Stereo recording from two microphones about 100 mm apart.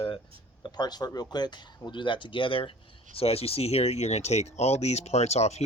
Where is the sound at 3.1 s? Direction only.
80° left.